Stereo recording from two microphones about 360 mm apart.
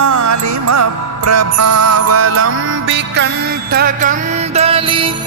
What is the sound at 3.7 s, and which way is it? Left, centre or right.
Music, right.